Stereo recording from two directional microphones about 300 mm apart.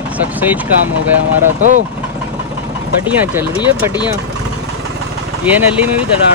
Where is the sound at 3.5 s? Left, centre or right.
Centre.